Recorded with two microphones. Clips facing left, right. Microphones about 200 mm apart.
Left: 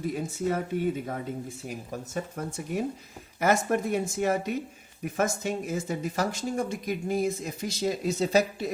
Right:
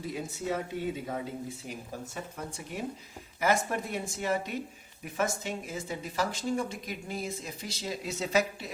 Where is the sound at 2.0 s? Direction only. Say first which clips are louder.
Left 6 dB; 45° left (ahead or behind).